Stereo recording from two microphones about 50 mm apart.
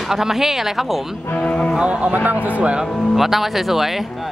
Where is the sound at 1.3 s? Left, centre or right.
Left.